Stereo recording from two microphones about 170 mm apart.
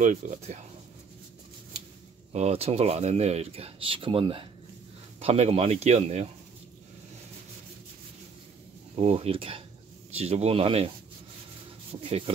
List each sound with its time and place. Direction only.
0.0 s speech: 50° right (ahead or behind)
2.3 s speech: 40° right (ahead or behind)
8.9 s speech: 40° right (ahead or behind)
11.9 s speech: 35° right (ahead or behind)